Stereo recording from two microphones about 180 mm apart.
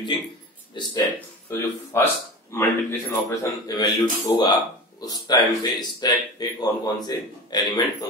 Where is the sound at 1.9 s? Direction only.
15° left (ahead or behind).